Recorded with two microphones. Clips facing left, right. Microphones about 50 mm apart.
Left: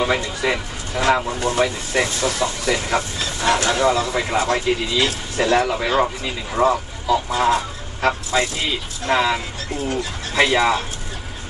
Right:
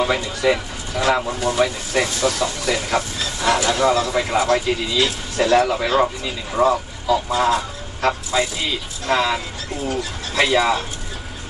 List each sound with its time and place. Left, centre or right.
0.4 s speech: centre
9.1 s speech: centre
9.8 s speech: centre